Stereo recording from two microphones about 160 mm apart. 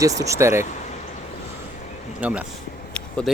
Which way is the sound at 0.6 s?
50° left (ahead or behind).